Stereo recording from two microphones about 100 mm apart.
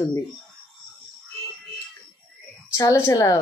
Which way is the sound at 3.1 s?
35° left (ahead or behind).